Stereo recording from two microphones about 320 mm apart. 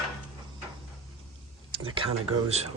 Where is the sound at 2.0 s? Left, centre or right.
Centre.